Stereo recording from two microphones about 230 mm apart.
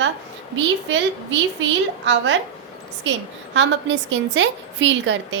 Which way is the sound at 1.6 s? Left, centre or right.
Right.